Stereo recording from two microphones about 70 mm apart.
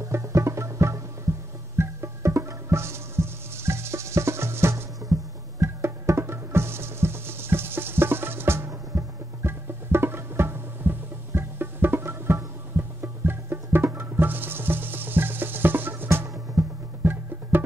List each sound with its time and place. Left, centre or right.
0.0 s music: right